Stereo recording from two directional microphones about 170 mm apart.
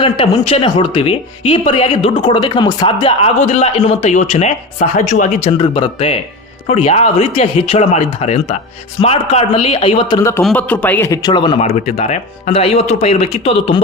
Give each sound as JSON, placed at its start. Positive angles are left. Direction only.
{"t": 0.0, "sound": "speech", "side_deg": 35}
{"t": 5.5, "sound": "speech", "side_deg": 30}
{"t": 10.2, "sound": "a man's voice", "side_deg": 15}